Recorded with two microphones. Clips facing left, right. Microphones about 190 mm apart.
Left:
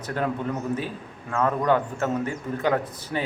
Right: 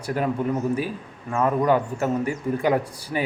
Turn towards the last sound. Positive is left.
turn(degrees=-10)  # may be behind; listen again after turning